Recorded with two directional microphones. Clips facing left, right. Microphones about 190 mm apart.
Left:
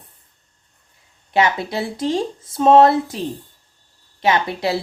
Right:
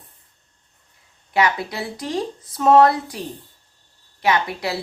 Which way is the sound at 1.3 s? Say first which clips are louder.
Left 2 dB; 25° left (ahead or behind).